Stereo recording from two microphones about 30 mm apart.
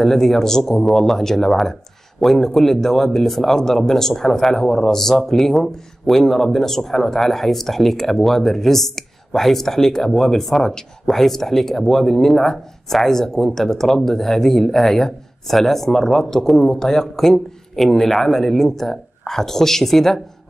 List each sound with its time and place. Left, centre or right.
0.0 s speech: centre